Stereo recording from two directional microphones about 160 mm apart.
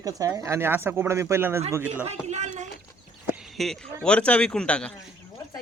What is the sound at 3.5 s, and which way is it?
A man's voice, centre (ahead or behind).